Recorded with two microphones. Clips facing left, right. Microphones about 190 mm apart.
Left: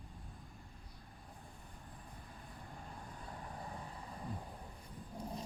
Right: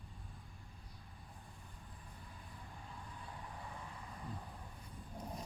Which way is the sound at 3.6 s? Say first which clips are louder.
Left 3 dB; 35° left (ahead or behind).